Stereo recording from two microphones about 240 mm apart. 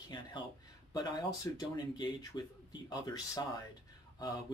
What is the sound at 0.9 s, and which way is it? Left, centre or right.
Speech, centre.